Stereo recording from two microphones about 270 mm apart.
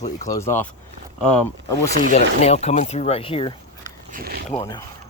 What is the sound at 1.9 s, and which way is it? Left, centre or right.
Speech, right.